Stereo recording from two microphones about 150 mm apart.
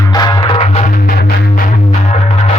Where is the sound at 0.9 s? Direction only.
70° left (ahead or behind).